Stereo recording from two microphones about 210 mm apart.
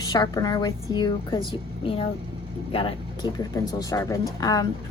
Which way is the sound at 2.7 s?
25° left (ahead or behind).